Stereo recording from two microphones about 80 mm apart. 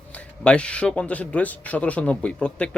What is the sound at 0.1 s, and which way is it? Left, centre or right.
Speech, centre.